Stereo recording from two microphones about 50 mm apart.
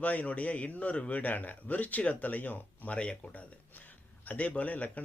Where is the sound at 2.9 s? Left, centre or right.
Left.